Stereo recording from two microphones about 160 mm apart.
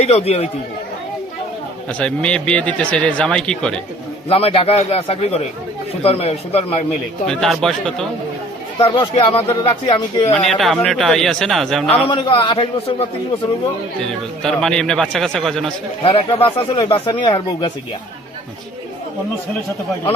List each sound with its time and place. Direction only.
0.0 s speech: 40° left (ahead or behind)
1.9 s speech: 5° left (ahead or behind)
4.3 s speech: 40° left (ahead or behind)
7.3 s speech: 5° left (ahead or behind)
8.8 s speech: 35° left (ahead or behind)
10.3 s speech: 5° left (ahead or behind)
11.9 s speech: 30° left (ahead or behind)
14.0 s speech: 5° left (ahead or behind)
16.0 s speech: 35° left (ahead or behind)
16.7 s speech: 25° left (ahead or behind)